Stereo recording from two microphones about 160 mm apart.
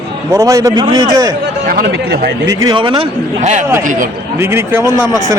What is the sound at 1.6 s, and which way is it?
Speech, 80° right.